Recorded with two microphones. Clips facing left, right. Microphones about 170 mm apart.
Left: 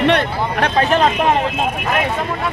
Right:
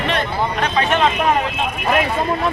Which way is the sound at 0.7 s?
40° left (ahead or behind).